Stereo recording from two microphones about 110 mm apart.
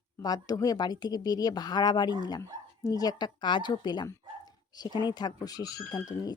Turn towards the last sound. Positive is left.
turn(degrees=35)  # may be behind; listen again after turning